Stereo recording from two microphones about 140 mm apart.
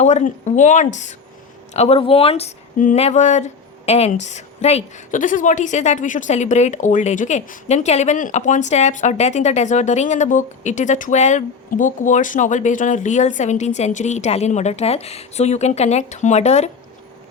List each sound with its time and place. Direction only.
0.0 s a woman's voice: 55° left (ahead or behind)
2.7 s a woman's voice: 65° left (ahead or behind)
3.0 s a woman's voice: 55° left (ahead or behind)